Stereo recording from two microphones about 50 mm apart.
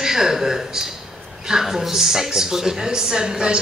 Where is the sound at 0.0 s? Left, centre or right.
Centre.